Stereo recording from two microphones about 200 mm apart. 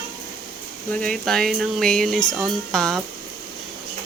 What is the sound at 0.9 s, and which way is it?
Speech, 5° left (ahead or behind).